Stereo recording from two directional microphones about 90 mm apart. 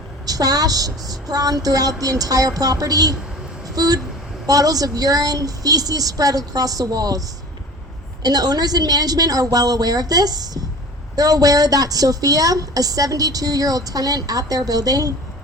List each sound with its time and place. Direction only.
0.3 s a woman's voice: 45° right (ahead or behind)